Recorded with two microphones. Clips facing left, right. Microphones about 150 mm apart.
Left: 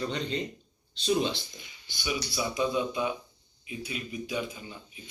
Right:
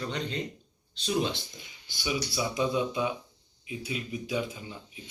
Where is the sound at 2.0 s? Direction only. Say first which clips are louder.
Right 1 dB; 20° right (ahead or behind).